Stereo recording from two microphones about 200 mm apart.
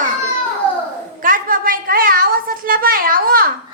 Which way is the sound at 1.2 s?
45° right (ahead or behind).